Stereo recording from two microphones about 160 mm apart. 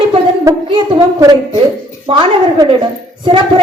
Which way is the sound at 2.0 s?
35° right (ahead or behind).